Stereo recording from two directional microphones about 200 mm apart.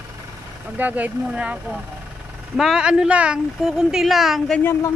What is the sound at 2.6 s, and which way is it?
Speech, 5° right (ahead or behind).